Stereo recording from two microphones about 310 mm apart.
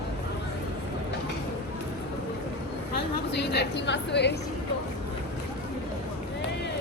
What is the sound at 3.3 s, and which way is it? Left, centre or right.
A woman's voice, left.